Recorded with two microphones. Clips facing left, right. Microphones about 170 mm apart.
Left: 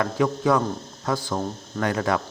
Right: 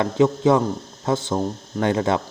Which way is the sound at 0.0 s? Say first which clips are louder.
Right 5 dB; 25° right (ahead or behind).